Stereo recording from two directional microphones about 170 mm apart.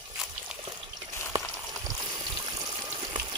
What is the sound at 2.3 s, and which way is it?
Water, 20° right (ahead or behind).